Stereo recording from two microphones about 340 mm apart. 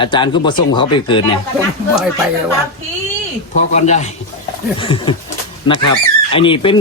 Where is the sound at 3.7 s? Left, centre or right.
Centre.